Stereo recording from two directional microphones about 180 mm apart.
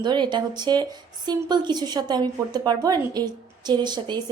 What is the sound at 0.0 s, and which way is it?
A woman's voice, 25° right (ahead or behind).